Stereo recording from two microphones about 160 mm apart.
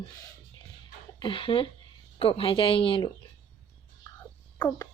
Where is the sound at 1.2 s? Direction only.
30° left (ahead or behind).